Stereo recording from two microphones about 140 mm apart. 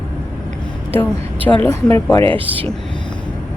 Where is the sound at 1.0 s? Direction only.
10° left (ahead or behind).